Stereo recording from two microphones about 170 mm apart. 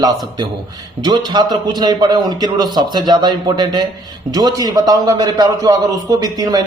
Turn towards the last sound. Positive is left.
turn(degrees=-20)  # may be behind; listen again after turning